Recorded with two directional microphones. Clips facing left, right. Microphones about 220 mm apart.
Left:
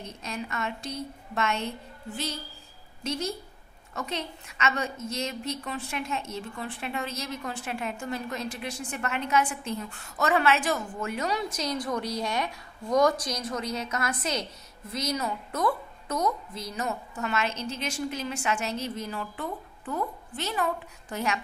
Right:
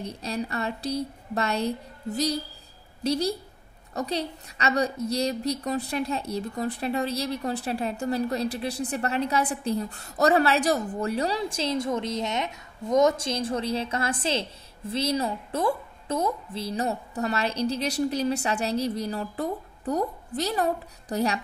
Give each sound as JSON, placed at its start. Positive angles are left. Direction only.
{"t": 0.0, "sound": "a woman's voice", "side_deg": -35}